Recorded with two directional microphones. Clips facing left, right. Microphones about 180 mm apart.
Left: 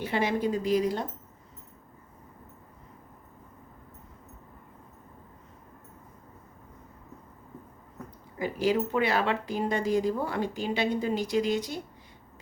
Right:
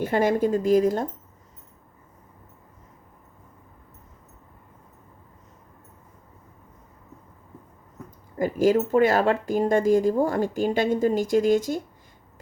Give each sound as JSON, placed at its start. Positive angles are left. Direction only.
{"t": 0.0, "sound": "speech", "side_deg": -45}
{"t": 8.4, "sound": "speech", "side_deg": -45}